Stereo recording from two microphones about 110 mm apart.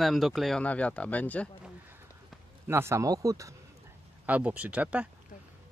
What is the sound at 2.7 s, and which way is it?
Speech, 25° right (ahead or behind).